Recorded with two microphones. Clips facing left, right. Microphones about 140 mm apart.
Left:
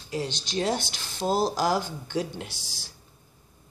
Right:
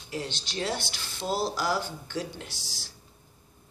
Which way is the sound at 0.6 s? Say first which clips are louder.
Left 5 dB; 40° left (ahead or behind).